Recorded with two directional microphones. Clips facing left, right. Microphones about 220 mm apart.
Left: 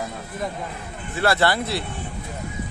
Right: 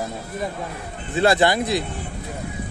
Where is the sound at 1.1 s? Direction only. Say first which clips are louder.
Right 3 dB; 20° right (ahead or behind).